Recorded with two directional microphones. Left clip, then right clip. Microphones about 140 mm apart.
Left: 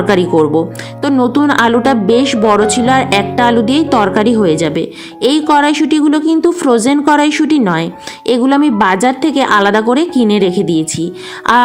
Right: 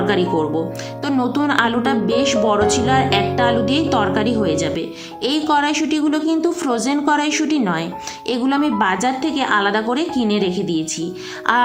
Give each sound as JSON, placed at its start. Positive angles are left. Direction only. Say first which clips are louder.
{"t": 0.1, "sound": "speech", "louder": "left 10 dB", "side_deg": 55}
{"t": 1.2, "sound": "a woman's voice", "louder": "left 7 dB", "side_deg": 40}